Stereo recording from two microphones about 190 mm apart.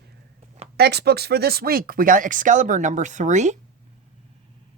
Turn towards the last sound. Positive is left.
turn(degrees=-40)  # may be behind; listen again after turning